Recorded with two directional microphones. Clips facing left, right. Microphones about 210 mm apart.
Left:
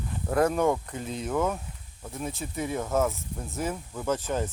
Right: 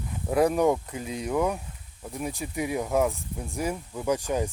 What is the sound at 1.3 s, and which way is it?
Speech, 15° right (ahead or behind).